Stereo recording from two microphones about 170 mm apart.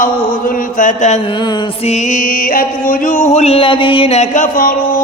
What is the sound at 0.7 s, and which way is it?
Mantra, 45° left (ahead or behind).